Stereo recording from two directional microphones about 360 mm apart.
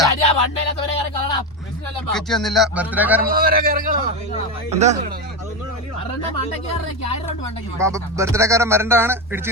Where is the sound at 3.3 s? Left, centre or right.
Right.